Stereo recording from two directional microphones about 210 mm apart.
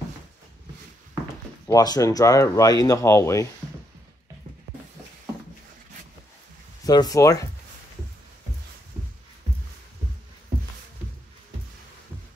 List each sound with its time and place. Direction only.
1.7 s speech: 15° left (ahead or behind)
6.8 s speech: 15° left (ahead or behind)